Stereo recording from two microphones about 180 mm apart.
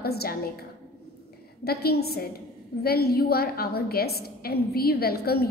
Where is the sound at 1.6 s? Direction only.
60° left (ahead or behind).